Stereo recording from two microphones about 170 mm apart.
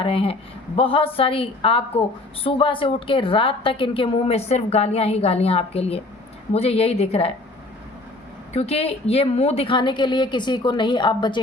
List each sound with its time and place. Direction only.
0.0 s a woman's voice: 35° left (ahead or behind)
8.5 s a woman's voice: 35° left (ahead or behind)